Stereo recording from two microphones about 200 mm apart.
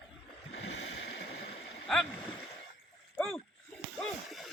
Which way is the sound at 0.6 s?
65° left (ahead or behind).